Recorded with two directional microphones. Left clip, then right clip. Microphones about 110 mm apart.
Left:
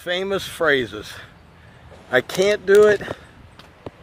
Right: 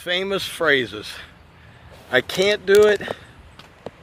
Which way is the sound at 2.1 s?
10° left (ahead or behind).